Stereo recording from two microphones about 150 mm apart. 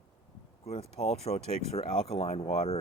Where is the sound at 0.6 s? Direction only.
45° left (ahead or behind).